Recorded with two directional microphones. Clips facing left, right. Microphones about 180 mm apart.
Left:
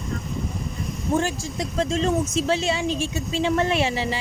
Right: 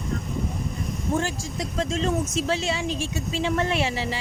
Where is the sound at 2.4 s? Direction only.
25° left (ahead or behind).